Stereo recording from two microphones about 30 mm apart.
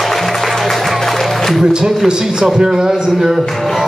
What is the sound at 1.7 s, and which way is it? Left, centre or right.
A man's voice, right.